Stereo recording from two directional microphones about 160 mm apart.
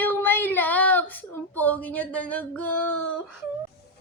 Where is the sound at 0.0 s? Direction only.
10° left (ahead or behind).